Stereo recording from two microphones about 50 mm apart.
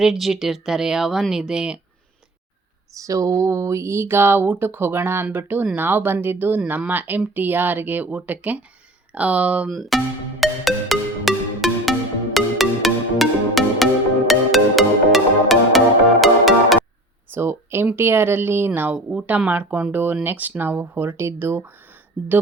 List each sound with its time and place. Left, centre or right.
0.0 s speech: centre
3.0 s a sound: right
4.4 s speech: right
9.6 s music: centre
17.3 s speech: right
18.7 s speech: right